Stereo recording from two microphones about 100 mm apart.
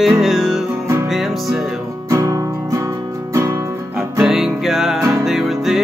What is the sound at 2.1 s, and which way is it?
Music, 35° right (ahead or behind).